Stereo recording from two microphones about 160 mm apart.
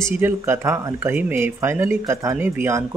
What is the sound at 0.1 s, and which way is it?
Speech, 15° right (ahead or behind).